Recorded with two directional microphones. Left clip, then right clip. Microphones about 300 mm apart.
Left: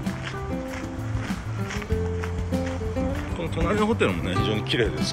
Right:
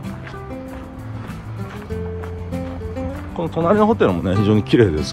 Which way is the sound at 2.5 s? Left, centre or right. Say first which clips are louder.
Left 1 dB; centre.